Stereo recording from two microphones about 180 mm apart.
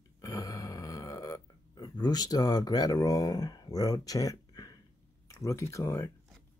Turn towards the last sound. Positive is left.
turn(degrees=15)  # may be behind; listen again after turning